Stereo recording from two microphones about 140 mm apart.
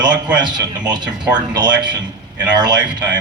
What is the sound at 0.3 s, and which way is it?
Speech, 30° right (ahead or behind).